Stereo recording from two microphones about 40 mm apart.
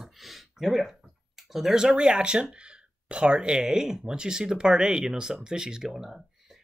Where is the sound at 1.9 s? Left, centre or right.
Right.